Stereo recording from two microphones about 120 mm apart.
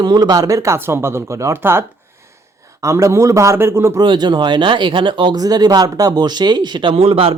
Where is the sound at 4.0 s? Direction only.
40° right (ahead or behind).